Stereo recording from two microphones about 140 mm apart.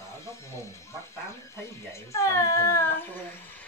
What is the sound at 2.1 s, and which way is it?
Speech, 20° left (ahead or behind).